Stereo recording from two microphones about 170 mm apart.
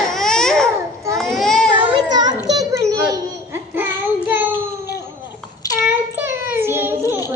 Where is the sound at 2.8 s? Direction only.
20° right (ahead or behind).